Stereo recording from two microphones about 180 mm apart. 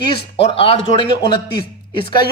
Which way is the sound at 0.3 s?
30° left (ahead or behind).